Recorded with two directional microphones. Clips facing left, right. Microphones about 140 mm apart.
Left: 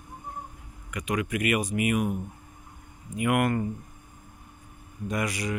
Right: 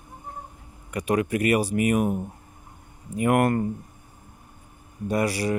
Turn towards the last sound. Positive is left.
turn(degrees=-35)  # may be behind; listen again after turning